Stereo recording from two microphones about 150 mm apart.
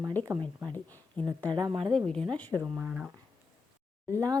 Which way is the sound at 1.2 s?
30° right (ahead or behind).